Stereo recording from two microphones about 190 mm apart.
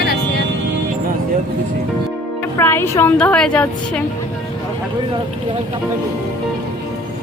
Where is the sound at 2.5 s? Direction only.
10° left (ahead or behind).